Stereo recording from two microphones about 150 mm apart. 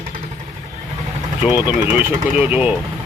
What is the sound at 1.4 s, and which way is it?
Speech, 10° right (ahead or behind).